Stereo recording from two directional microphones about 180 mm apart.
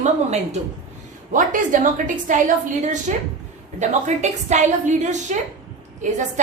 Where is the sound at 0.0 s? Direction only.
40° right (ahead or behind).